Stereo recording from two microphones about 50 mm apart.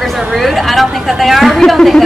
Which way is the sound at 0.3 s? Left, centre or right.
Centre.